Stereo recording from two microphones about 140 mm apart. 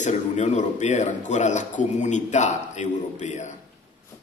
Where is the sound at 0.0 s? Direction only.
60° left (ahead or behind).